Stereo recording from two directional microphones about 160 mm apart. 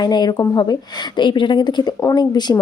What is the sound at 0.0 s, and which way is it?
Speech, 25° left (ahead or behind).